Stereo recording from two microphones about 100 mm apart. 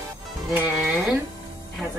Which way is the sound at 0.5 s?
15° right (ahead or behind).